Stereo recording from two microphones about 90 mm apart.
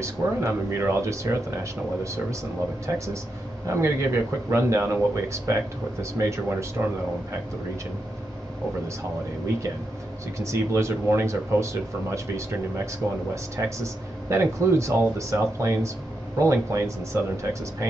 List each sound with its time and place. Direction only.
0.0 s speech: 30° right (ahead or behind)
3.6 s speech: 30° right (ahead or behind)
10.4 s speech: 35° right (ahead or behind)